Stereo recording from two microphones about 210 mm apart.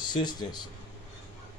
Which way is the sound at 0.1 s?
20° left (ahead or behind).